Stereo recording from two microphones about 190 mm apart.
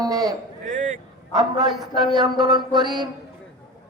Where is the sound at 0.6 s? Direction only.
40° right (ahead or behind).